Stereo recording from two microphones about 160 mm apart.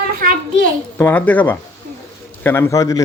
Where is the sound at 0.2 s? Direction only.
65° right (ahead or behind).